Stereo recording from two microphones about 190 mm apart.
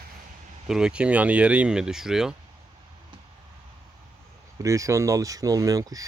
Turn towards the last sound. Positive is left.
turn(degrees=-20)  # may be behind; listen again after turning